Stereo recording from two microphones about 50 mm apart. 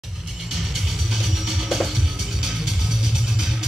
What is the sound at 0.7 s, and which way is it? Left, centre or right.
Music, centre.